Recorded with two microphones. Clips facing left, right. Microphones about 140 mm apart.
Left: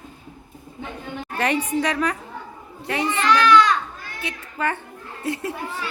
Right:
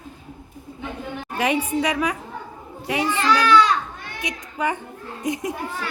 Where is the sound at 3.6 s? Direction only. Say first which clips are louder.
Even; 25° right (ahead or behind).